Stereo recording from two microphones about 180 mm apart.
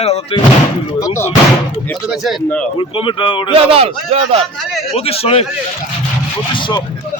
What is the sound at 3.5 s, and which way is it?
Speech, 35° right (ahead or behind).